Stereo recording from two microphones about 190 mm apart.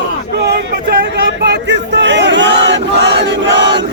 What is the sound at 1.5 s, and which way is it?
Battle cry, 65° right (ahead or behind).